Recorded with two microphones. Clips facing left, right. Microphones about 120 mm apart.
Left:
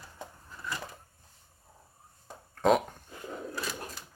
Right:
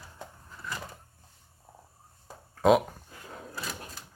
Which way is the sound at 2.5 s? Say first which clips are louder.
Right 3 dB; 5° right (ahead or behind).